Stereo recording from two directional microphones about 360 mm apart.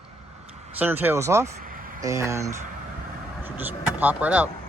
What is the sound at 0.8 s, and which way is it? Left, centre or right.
Speech, centre.